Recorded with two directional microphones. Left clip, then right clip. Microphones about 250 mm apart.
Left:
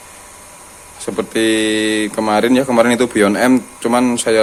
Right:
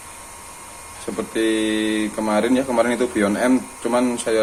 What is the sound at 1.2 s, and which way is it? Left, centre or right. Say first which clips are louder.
Speech: left 6 dB; left.